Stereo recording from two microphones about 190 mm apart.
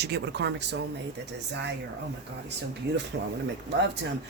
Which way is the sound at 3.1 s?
65° right (ahead or behind).